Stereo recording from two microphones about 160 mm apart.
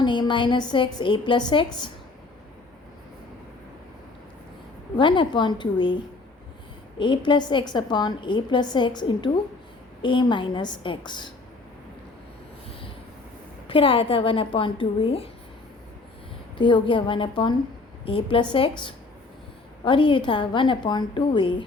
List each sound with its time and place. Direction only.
0.0 s a woman's voice: 30° left (ahead or behind)
4.9 s a woman's voice: 30° left (ahead or behind)
7.0 s a woman's voice: 30° left (ahead or behind)
13.7 s a woman's voice: 35° left (ahead or behind)
16.6 s a woman's voice: 30° left (ahead or behind)
19.8 s a woman's voice: 30° left (ahead or behind)